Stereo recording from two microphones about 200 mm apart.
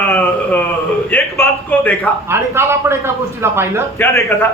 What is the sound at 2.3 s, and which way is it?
A man's voice, 10° right (ahead or behind).